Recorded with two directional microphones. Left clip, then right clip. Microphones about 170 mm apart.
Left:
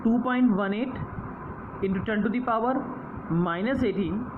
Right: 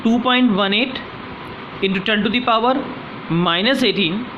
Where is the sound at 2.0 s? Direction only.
25° right (ahead or behind).